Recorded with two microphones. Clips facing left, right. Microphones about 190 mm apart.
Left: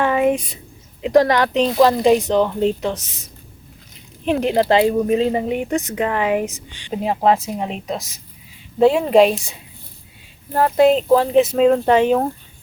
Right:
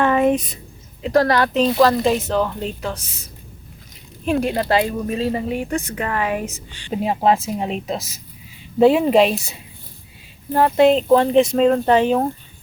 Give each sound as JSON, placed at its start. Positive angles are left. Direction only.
{"t": 0.0, "sound": "a woman's voice", "side_deg": 10}
{"t": 4.3, "sound": "speech", "side_deg": 20}
{"t": 7.0, "sound": "speech", "side_deg": -5}